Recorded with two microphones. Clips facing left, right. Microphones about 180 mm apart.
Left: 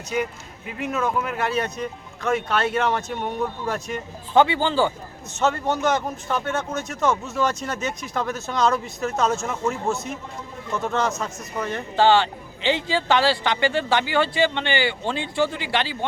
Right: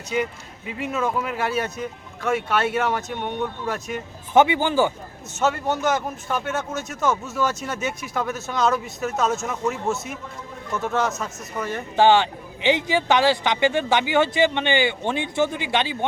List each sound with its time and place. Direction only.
0.8 s speech: 5° right (ahead or behind)
4.4 s speech: 15° right (ahead or behind)
11.9 s speech: 15° right (ahead or behind)